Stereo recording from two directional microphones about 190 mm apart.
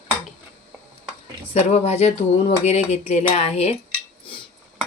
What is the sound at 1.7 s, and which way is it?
Speech, 35° left (ahead or behind).